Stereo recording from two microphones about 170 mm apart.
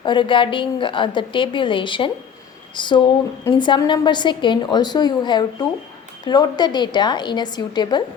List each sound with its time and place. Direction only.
0.0 s a woman's voice: 30° left (ahead or behind)